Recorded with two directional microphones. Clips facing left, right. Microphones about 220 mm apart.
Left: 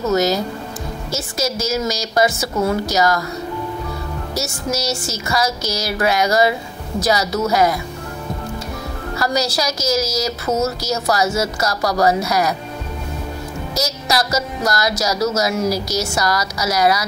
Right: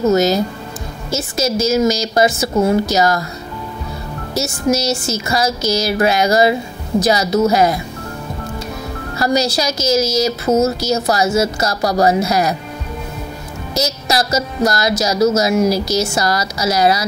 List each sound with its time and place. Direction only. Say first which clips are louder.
0.1 s a woman's voice: right 3 dB; 25° right (ahead or behind)
4.3 s a woman's voice: right 7 dB; 25° right (ahead or behind)
9.2 s a woman's voice: right 4 dB; 25° right (ahead or behind)
13.7 s a woman's voice: right 3 dB; 25° right (ahead or behind)